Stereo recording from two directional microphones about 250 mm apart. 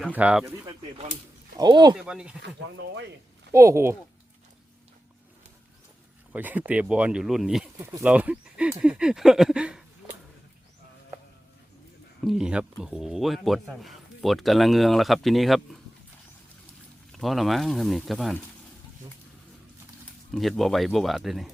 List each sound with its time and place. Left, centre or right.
0.0 s speech: centre
2.0 s speech: centre
2.7 s speech: right
3.5 s speech: centre
6.3 s speech: centre
12.2 s speech: centre
17.1 s speech: centre
20.3 s speech: centre